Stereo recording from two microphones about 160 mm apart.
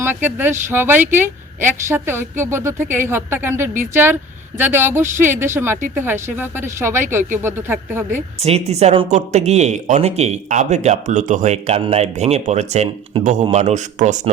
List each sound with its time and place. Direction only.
0.0 s speech: 15° right (ahead or behind)
8.1 s speech: 40° right (ahead or behind)